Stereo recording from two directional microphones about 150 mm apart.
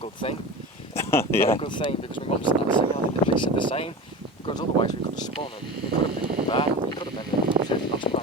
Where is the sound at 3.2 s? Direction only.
35° left (ahead or behind).